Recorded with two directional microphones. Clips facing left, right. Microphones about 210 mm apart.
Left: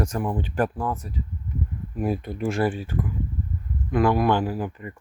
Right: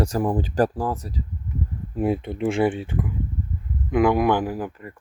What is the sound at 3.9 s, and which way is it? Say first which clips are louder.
Speech: right 2 dB; 15° right (ahead or behind).